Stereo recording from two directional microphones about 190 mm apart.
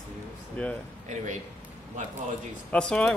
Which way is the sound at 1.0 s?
40° right (ahead or behind).